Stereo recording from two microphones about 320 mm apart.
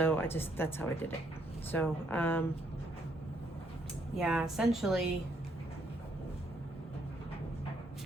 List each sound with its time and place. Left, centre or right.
0.0 s a woman's voice: centre
4.2 s a woman's voice: centre